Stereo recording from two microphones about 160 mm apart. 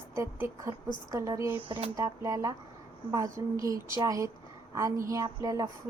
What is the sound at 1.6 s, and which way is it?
Speech, 35° right (ahead or behind).